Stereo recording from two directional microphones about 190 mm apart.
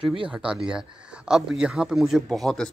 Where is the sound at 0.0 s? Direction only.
25° right (ahead or behind).